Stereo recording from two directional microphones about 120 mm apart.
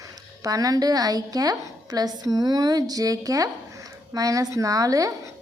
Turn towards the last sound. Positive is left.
turn(degrees=-30)  # may be behind; listen again after turning